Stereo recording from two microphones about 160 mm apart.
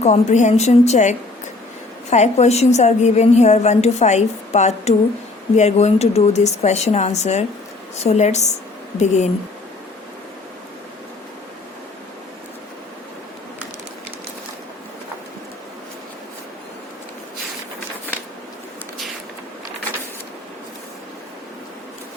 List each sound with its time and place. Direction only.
0.0 s a woman's voice: 45° left (ahead or behind)